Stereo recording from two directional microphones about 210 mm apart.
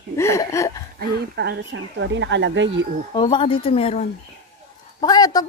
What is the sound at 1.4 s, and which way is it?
Speech, 55° right (ahead or behind).